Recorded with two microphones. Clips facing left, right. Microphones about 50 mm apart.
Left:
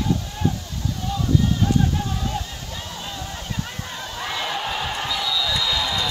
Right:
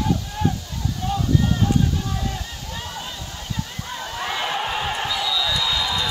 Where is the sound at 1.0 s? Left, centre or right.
Right.